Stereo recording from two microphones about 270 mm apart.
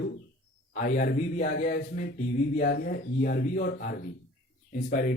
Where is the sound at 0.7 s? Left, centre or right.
Left.